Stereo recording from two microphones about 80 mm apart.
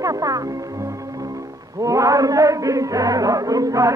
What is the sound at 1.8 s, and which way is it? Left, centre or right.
Music, right.